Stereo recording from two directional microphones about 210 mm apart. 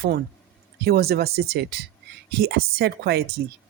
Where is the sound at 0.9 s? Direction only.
45° right (ahead or behind).